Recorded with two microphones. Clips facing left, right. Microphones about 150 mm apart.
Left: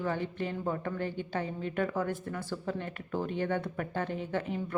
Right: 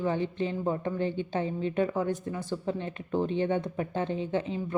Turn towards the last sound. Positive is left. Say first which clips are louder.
# right 4 dB
turn(degrees=-20)  # may be behind; listen again after turning